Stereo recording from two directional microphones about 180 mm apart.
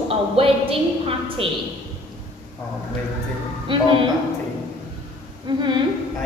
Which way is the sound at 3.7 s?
25° right (ahead or behind).